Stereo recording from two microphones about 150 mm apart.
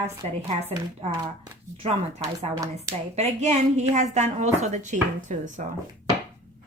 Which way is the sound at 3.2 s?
50° right (ahead or behind).